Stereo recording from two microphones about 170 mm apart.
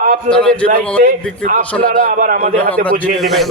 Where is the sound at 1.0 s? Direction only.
50° right (ahead or behind).